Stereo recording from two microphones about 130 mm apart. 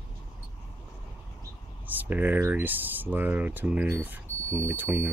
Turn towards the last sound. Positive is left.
turn(degrees=-15)  # may be behind; listen again after turning